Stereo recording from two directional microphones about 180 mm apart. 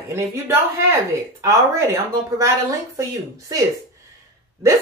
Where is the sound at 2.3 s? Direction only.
15° right (ahead or behind).